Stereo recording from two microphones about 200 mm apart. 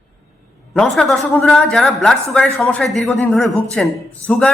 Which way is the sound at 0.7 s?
5° left (ahead or behind).